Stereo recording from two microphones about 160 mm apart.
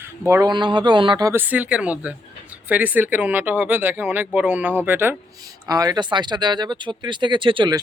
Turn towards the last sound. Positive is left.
turn(degrees=-30)  # may be behind; listen again after turning